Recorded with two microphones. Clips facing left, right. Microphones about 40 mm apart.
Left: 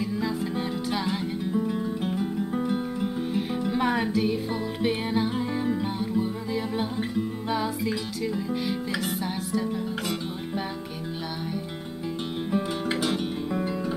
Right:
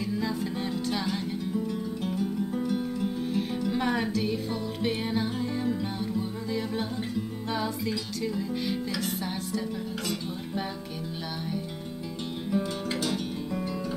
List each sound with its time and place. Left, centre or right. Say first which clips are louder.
0.0 s music: left 2 dB; centre
12.4 s music: left 2 dB; left